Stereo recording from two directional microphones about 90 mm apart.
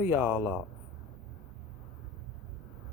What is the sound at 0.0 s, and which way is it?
Speech, 20° right (ahead or behind).